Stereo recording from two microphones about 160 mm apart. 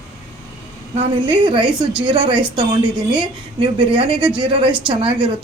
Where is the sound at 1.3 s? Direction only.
30° right (ahead or behind).